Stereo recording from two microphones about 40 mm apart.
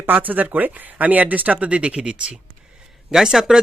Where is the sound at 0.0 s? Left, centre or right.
Right.